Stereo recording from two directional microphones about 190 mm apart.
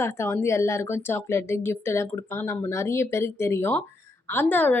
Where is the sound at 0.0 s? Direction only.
15° left (ahead or behind).